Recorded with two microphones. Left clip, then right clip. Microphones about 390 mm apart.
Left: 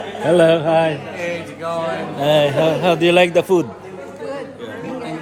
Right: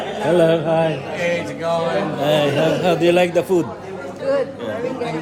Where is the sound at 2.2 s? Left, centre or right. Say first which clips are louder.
Left 3 dB; centre.